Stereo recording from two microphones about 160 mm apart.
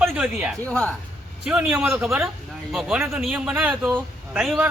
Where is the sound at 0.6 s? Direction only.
10° left (ahead or behind).